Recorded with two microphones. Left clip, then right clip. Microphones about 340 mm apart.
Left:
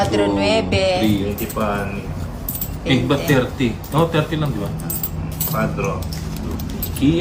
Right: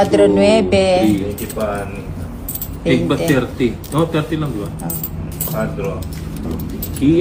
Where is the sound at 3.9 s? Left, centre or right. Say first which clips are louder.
Left 2 dB; centre.